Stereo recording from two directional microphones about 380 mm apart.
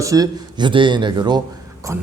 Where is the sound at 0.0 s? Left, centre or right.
Centre.